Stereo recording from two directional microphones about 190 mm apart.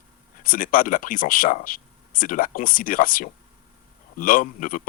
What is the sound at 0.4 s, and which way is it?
Speech, 45° left (ahead or behind).